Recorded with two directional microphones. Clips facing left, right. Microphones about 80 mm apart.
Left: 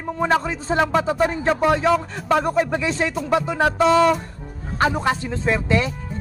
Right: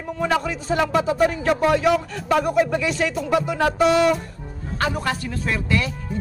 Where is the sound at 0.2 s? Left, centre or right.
Left.